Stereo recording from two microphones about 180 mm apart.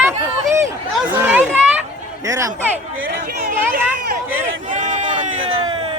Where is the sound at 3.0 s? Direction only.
50° right (ahead or behind).